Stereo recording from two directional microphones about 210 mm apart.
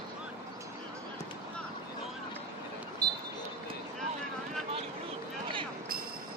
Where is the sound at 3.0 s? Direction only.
20° right (ahead or behind).